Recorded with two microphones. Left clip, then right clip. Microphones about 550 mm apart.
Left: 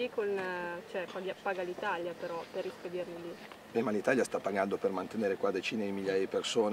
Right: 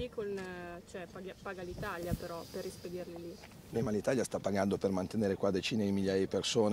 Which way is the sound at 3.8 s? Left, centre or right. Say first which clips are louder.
Left 3 dB; right.